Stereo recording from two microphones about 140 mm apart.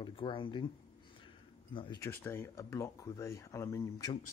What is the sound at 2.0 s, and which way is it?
Speech, 20° left (ahead or behind).